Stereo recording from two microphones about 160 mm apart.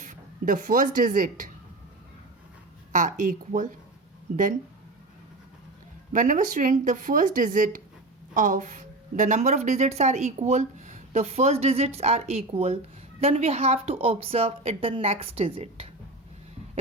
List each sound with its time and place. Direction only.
0.0 s speech: 55° right (ahead or behind)
2.9 s speech: 55° right (ahead or behind)
6.1 s a woman's voice: 55° right (ahead or behind); by 15.9 s 35° right (ahead or behind)